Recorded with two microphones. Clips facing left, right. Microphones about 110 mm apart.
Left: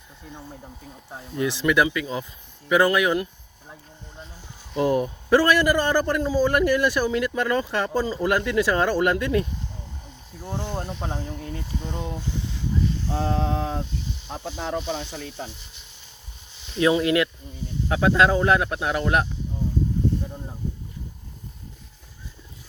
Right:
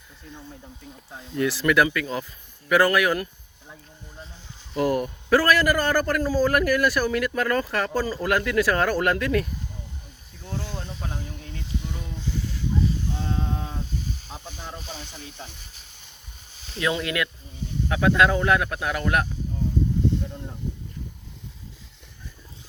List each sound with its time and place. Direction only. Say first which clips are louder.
1.3 s a man's voice: even; 20° left (ahead or behind)
4.8 s a man's voice: left 2 dB; 20° left (ahead or behind)
10.8 s speech: left 5 dB; 40° left (ahead or behind)
11.8 s speech: left 4 dB; 65° left (ahead or behind)
13.1 s a sound: left 5 dB; 80° left
14.3 s speech: left 8 dB; 55° left (ahead or behind)
16.7 s a man's voice: left 6 dB; 30° left (ahead or behind)